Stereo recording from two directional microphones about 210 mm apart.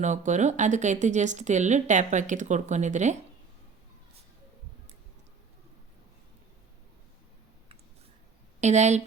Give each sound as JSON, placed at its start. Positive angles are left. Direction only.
{"t": 0.0, "sound": "speech", "side_deg": -35}
{"t": 8.6, "sound": "speech", "side_deg": -35}